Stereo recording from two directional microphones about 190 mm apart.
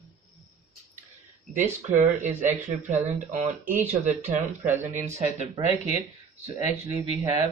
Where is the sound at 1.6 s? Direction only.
40° right (ahead or behind).